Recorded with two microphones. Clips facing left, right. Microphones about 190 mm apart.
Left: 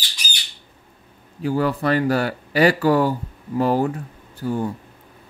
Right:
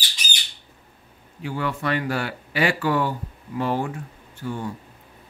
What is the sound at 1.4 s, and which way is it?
Speech, 40° left (ahead or behind).